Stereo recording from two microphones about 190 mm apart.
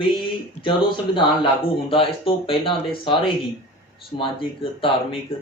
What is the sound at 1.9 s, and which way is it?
Speech, 30° left (ahead or behind).